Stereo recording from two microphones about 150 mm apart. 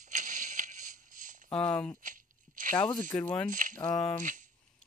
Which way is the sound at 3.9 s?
5° left (ahead or behind).